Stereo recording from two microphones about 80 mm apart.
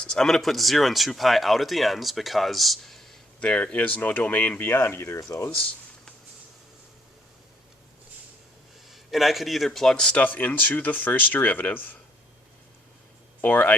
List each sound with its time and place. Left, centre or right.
0.0 s speech: centre
3.4 s speech: centre; by 5.5 s left
8.9 s speech: centre
10.2 s speech: left
13.4 s speech: left